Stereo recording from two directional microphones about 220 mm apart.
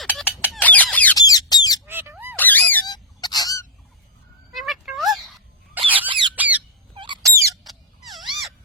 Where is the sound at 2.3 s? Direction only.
10° left (ahead or behind).